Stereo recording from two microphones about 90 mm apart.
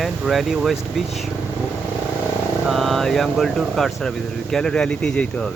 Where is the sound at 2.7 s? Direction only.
Centre (ahead or behind).